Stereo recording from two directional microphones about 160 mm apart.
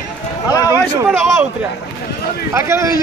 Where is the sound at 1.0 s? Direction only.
Centre (ahead or behind).